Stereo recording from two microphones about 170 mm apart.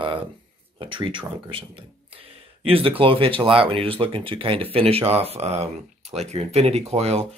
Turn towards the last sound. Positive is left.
turn(degrees=-40)  # may be behind; listen again after turning